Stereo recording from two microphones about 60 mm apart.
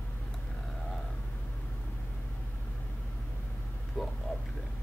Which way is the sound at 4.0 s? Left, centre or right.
Centre.